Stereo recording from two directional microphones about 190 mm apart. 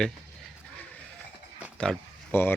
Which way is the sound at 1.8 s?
5° left (ahead or behind).